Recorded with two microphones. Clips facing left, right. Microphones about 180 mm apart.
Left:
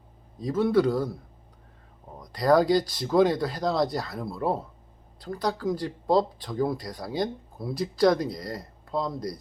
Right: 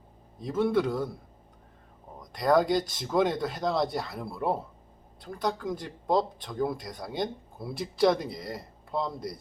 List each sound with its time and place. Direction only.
0.4 s speech: centre (ahead or behind)
2.1 s speech: centre (ahead or behind)